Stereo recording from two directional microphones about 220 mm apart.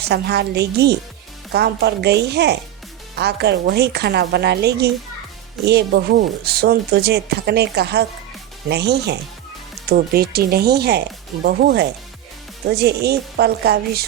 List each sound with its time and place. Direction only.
0.0 s speech: 50° right (ahead or behind)